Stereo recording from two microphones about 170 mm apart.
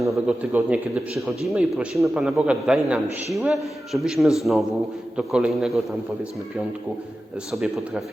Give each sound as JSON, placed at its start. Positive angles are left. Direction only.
{"t": 0.1, "sound": "a man's voice", "side_deg": -5}
{"t": 7.5, "sound": "a man's voice", "side_deg": 0}